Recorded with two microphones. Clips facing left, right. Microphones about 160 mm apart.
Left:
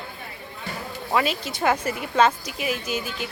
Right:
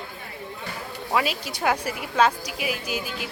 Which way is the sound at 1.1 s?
5° right (ahead or behind).